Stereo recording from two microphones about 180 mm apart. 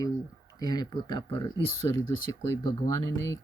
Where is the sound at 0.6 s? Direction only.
20° left (ahead or behind).